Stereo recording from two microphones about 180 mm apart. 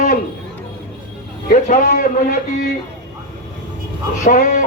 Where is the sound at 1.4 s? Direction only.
45° left (ahead or behind).